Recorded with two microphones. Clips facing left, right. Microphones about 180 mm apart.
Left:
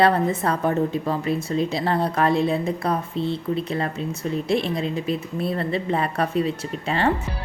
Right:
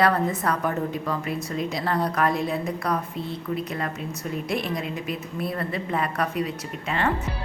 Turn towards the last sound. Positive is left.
turn(degrees=30)  # may be behind; listen again after turning